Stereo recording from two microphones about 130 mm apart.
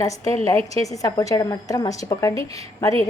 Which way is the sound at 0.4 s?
25° left (ahead or behind).